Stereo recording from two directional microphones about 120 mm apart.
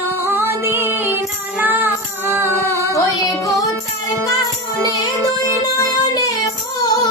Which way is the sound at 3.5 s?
30° left (ahead or behind).